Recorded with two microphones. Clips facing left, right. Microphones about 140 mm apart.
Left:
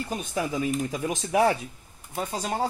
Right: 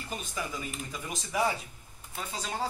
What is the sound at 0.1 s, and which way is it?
Speech, 45° left (ahead or behind).